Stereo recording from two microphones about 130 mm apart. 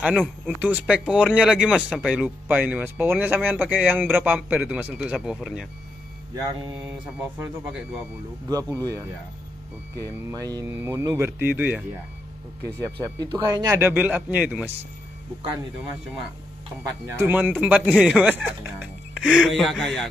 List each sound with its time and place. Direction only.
0.6 s speech: 10° right (ahead or behind)
8.5 s speech: 30° right (ahead or behind)
12.6 s speech: 30° right (ahead or behind)
13.7 s speech: 15° right (ahead or behind)
17.1 s speech: 15° right (ahead or behind)
19.1 s speech: centre (ahead or behind)